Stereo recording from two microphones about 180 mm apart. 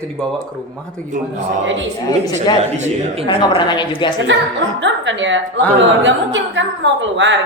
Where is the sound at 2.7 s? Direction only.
40° right (ahead or behind).